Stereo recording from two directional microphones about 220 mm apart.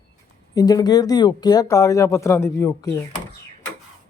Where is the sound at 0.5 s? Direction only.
15° left (ahead or behind).